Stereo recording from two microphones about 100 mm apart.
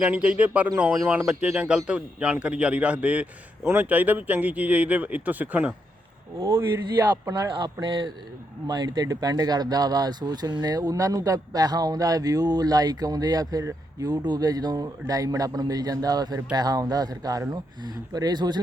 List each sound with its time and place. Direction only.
0.0 s a man's voice: 10° right (ahead or behind)
7.1 s speech: 45° right (ahead or behind)